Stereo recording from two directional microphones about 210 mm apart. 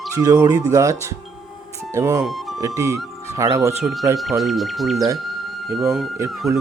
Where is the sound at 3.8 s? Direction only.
Centre (ahead or behind).